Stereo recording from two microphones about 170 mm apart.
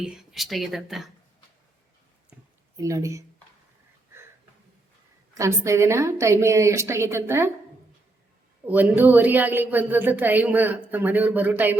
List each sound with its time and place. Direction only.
0.0 s speech: 5° right (ahead or behind)
2.3 s a sound: 10° right (ahead or behind)
2.7 s speech: 20° right (ahead or behind)
5.3 s a woman's voice: 15° right (ahead or behind)
8.6 s a woman's voice: 10° right (ahead or behind)